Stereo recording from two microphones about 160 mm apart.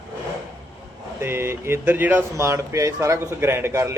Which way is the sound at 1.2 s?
15° right (ahead or behind).